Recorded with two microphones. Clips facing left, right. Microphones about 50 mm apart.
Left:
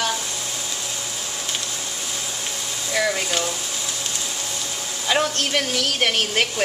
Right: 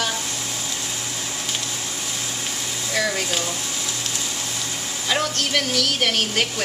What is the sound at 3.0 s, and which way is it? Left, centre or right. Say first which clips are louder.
Speech: left 1 dB; centre.